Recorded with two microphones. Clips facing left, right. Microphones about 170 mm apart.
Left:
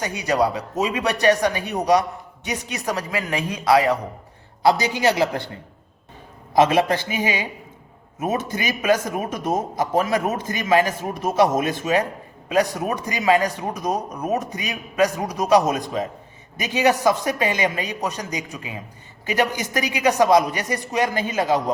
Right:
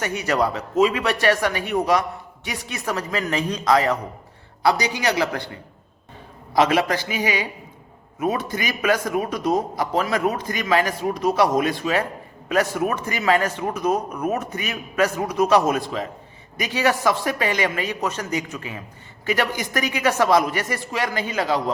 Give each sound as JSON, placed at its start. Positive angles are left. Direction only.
{"t": 0.0, "sound": "speech", "side_deg": 15}
{"t": 5.0, "sound": "speech", "side_deg": 20}
{"t": 6.5, "sound": "speech", "side_deg": 25}
{"t": 8.4, "sound": "speech", "side_deg": 20}